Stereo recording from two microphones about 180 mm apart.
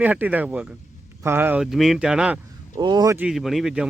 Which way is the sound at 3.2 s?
5° right (ahead or behind).